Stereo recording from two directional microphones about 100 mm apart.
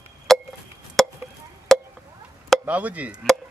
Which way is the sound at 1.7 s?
5° left (ahead or behind).